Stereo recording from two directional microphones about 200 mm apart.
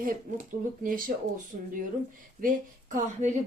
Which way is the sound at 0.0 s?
45° right (ahead or behind).